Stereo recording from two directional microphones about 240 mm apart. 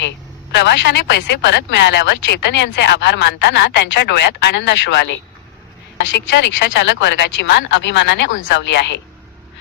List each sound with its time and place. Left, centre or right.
0.5 s speech: left